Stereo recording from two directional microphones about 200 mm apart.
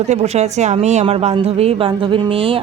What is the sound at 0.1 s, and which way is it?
Speech, 35° right (ahead or behind).